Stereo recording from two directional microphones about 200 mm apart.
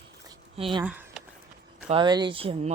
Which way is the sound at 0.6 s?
25° right (ahead or behind).